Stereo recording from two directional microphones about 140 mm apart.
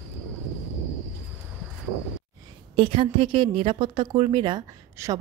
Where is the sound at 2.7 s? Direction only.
40° right (ahead or behind).